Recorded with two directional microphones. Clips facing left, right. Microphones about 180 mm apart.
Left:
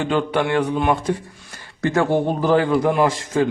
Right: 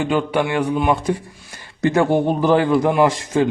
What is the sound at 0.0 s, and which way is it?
A man's voice, 10° right (ahead or behind).